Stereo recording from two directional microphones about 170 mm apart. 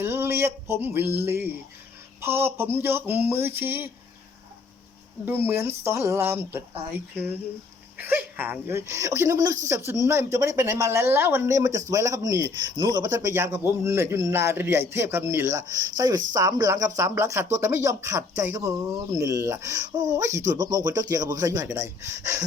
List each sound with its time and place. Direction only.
0.0 s a sound: 15° right (ahead or behind)
2.2 s speech: 15° right (ahead or behind)
5.2 s speech: 15° right (ahead or behind)
7.9 s speech: 10° right (ahead or behind)